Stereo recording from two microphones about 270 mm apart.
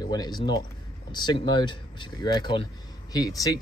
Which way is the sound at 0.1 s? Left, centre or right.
Centre.